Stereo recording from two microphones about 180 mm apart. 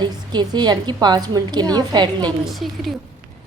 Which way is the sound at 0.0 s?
25° right (ahead or behind).